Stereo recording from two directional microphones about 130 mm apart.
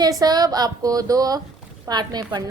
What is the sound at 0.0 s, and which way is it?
A woman's voice, 30° right (ahead or behind).